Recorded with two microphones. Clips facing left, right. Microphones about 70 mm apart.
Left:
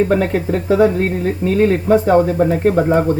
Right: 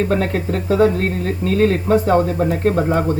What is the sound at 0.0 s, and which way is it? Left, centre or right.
Speech, centre.